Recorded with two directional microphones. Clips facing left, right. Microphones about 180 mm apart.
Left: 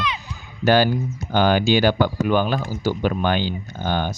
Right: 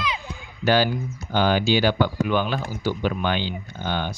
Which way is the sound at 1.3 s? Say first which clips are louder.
Left 3 dB; 50° left (ahead or behind).